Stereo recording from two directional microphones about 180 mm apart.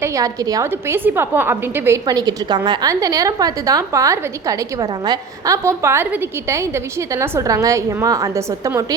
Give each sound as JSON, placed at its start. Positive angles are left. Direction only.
{"t": 0.0, "sound": "a woman's voice", "side_deg": -20}